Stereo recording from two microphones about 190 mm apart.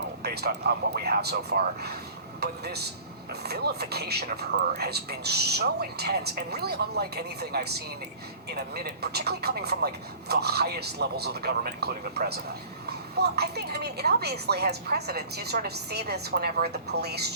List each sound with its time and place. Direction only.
0.2 s speech: 55° right (ahead or behind)